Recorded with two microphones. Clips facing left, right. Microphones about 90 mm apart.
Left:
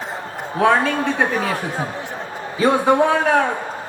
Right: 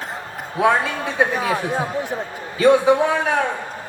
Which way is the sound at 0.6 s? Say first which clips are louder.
Left 2 dB; 10° right (ahead or behind).